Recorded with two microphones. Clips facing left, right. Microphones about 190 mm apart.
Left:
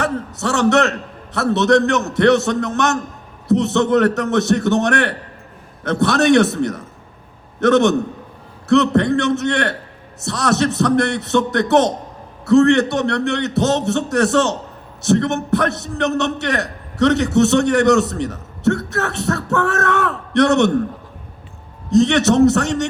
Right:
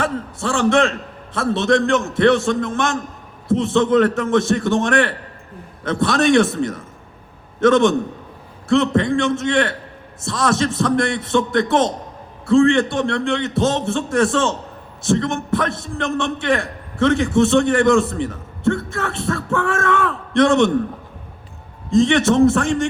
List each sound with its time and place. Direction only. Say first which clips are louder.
0.0 s a man's voice: left 1 dB; 70° left (ahead or behind)
21.8 s a man's voice: left 1 dB; 70° left (ahead or behind)